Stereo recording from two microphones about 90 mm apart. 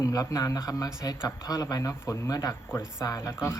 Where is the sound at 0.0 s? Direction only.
40° left (ahead or behind).